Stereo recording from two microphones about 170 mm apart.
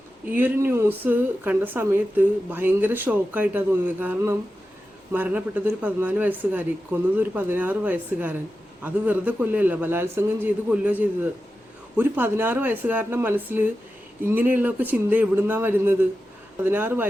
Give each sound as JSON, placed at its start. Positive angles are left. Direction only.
{"t": 0.3, "sound": "speech", "side_deg": -10}